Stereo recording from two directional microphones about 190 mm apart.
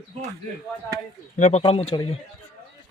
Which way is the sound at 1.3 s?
35° left (ahead or behind).